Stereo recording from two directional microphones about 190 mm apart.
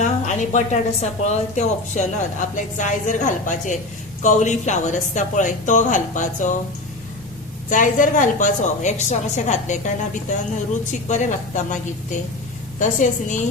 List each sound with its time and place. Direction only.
0.0 s a woman's voice: 40° left (ahead or behind)
7.7 s a woman's voice: 45° left (ahead or behind)
12.8 s a woman's voice: 40° left (ahead or behind)